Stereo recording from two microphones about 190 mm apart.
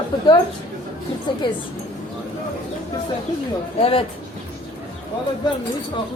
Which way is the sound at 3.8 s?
30° left (ahead or behind).